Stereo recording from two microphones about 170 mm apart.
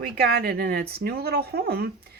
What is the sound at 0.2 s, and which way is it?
Speech, 65° right (ahead or behind).